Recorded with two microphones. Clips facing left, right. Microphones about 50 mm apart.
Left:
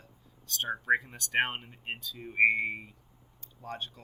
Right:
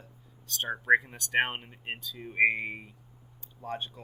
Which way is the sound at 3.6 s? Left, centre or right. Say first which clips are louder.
Right 3 dB; centre.